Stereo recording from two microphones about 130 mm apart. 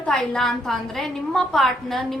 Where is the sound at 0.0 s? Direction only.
5° left (ahead or behind).